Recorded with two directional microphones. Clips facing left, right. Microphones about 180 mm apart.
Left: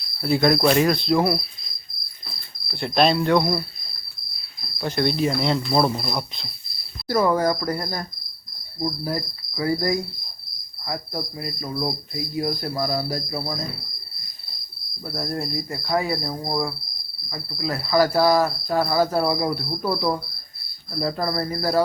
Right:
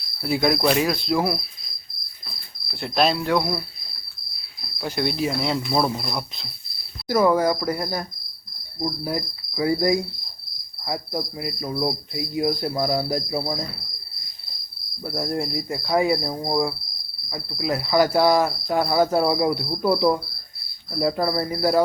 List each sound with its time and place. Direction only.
0.2 s speech: 10° right (ahead or behind)
2.6 s speech: 5° right (ahead or behind)
4.8 s speech: 10° right (ahead or behind)
7.1 s cricket: 10° right (ahead or behind)
15.0 s cricket: 10° right (ahead or behind)